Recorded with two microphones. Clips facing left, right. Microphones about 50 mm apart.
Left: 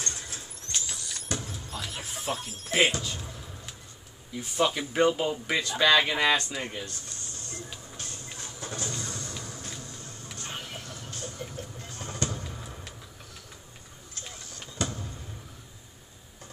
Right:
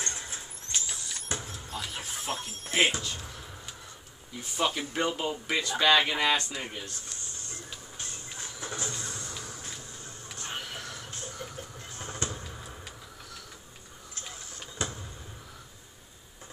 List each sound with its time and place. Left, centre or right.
0.0 s vehicle: right
1.5 s music: centre
3.0 s speech: centre
4.4 s speech: centre
8.5 s vehicle: right
9.7 s music: centre
11.1 s a sound: right
11.9 s fireworks: right
12.4 s a sound: centre
14.8 s vehicle: centre